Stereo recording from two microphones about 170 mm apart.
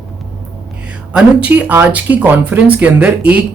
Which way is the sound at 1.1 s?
10° right (ahead or behind).